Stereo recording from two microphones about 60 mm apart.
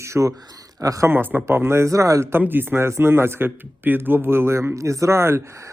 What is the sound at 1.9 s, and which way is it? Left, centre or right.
Speech, right.